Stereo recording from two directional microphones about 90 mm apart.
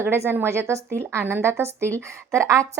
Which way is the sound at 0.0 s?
25° right (ahead or behind).